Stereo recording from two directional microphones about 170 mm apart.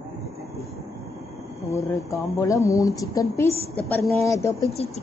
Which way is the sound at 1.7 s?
15° left (ahead or behind).